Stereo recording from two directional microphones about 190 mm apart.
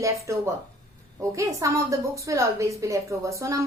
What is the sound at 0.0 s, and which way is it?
Speech, 15° right (ahead or behind).